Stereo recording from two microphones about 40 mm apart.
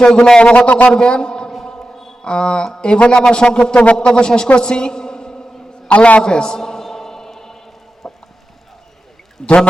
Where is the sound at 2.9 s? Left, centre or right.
Left.